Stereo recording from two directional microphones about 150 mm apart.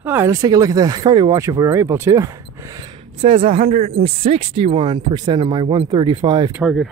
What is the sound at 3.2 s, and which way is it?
Speech, 35° right (ahead or behind).